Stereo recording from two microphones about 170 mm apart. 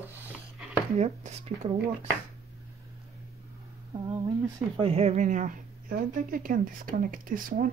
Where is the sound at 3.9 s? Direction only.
20° right (ahead or behind).